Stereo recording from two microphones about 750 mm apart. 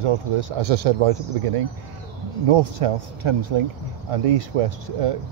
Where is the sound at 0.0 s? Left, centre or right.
Right.